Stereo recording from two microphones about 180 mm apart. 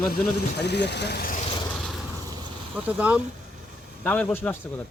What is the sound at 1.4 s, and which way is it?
Vehicle, 30° left (ahead or behind).